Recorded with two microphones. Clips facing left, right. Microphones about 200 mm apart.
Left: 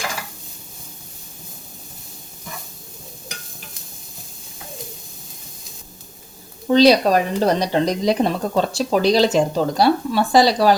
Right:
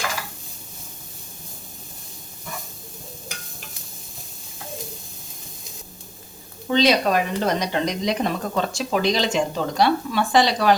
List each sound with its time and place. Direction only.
6.7 s speech: 35° left (ahead or behind)